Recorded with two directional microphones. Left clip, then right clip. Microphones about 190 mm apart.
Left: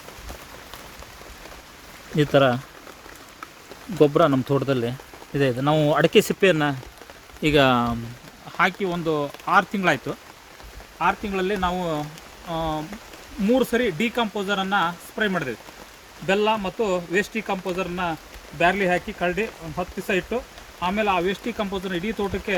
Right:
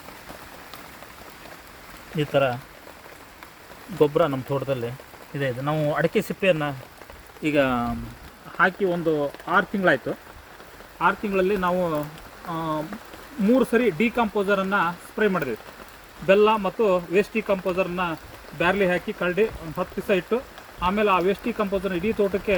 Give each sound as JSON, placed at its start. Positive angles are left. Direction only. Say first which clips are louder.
{"t": 2.1, "sound": "speech", "louder": "left 4 dB", "side_deg": 60}
{"t": 3.9, "sound": "speech", "louder": "left 3 dB", "side_deg": 60}
{"t": 7.4, "sound": "speech", "louder": "left 4 dB", "side_deg": 90}
{"t": 8.5, "sound": "speech", "louder": "right 1 dB", "side_deg": 60}
{"t": 11.0, "sound": "speech", "louder": "right 1 dB", "side_deg": 20}
{"t": 13.4, "sound": "speech", "louder": "right 1 dB", "side_deg": 15}